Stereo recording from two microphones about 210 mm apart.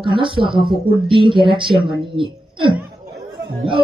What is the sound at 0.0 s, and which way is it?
Speech, 25° right (ahead or behind).